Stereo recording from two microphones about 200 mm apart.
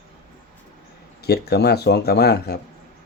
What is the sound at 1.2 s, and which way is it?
Speech, 55° left (ahead or behind).